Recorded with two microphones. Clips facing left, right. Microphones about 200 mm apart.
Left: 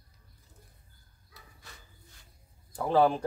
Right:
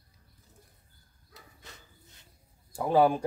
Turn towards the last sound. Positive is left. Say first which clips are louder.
# right 1 dB
turn(degrees=-10)  # may be behind; listen again after turning